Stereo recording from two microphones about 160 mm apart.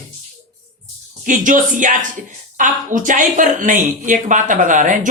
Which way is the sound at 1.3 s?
55° right (ahead or behind).